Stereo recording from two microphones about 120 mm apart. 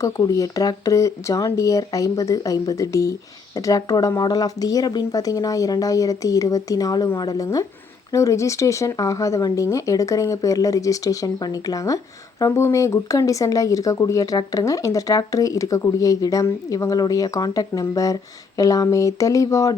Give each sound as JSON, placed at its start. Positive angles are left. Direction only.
{"t": 0.0, "sound": "speech", "side_deg": 25}